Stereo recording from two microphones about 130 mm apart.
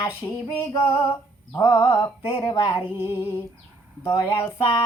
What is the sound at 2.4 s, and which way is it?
Female singing, 35° left (ahead or behind).